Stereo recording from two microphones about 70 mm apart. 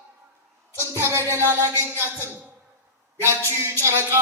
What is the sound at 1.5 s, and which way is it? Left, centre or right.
A man's voice, right.